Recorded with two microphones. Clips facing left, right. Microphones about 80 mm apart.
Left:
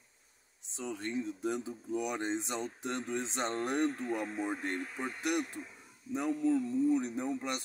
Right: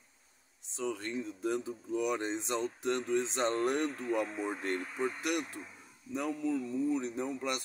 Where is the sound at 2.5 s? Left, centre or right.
Centre.